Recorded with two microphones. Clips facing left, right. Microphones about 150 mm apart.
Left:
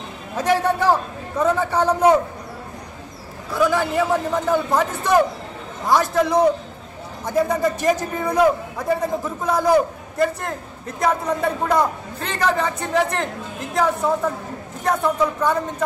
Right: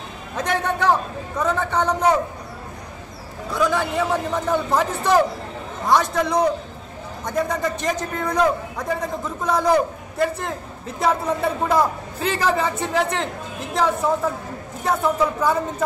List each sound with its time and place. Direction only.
0.4 s a woman's voice: 5° left (ahead or behind)
3.5 s a man's voice: 5° left (ahead or behind)